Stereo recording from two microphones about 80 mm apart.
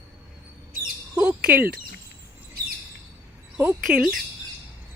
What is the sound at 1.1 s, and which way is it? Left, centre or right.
Speech, centre.